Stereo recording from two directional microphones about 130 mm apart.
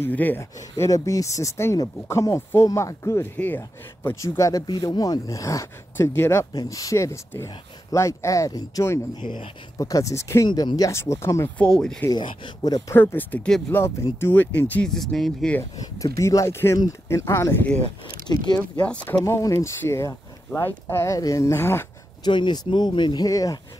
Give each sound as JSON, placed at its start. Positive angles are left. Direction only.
{"t": 0.0, "sound": "speech", "side_deg": 15}
{"t": 9.2, "sound": "speech", "side_deg": 40}
{"t": 9.8, "sound": "speech", "side_deg": 25}
{"t": 11.5, "sound": "speech", "side_deg": 5}
{"t": 12.1, "sound": "speech", "side_deg": 40}
{"t": 12.9, "sound": "speech", "side_deg": 15}
{"t": 16.0, "sound": "speech", "side_deg": 25}
{"t": 18.2, "sound": "speech", "side_deg": 30}
{"t": 18.6, "sound": "speech", "side_deg": 10}
{"t": 19.2, "sound": "speech", "side_deg": 20}
{"t": 22.2, "sound": "speech", "side_deg": 35}